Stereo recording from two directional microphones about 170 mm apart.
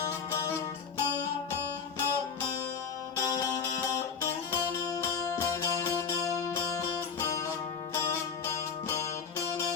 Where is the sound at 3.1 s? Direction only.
20° left (ahead or behind).